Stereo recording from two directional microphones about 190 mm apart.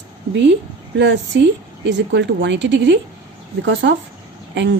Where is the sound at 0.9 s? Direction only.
70° right (ahead or behind).